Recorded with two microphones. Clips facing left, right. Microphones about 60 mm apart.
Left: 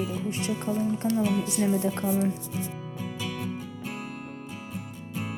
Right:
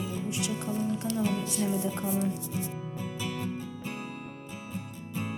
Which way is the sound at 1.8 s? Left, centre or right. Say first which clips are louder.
Left 4 dB; left.